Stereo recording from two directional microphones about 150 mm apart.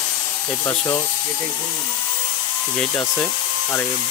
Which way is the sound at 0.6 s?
20° left (ahead or behind).